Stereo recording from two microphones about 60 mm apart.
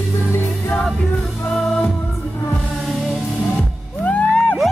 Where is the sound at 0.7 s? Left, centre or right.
Centre.